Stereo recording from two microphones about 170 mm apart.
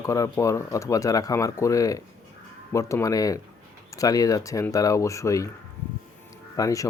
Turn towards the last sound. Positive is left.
turn(degrees=20)  # may be behind; listen again after turning